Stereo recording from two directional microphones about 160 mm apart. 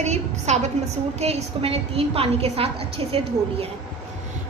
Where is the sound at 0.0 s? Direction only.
45° right (ahead or behind).